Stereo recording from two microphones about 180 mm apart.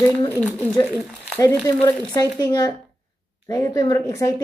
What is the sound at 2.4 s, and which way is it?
Speech, 20° left (ahead or behind).